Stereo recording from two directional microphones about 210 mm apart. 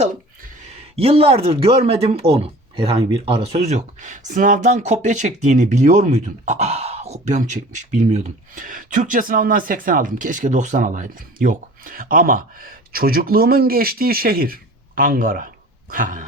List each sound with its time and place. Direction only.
0.9 s speech: 30° right (ahead or behind)